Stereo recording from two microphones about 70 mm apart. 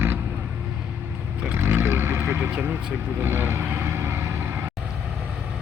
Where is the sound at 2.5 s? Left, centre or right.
Right.